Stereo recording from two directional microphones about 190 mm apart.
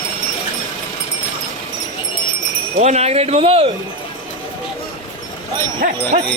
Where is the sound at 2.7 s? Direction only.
35° right (ahead or behind).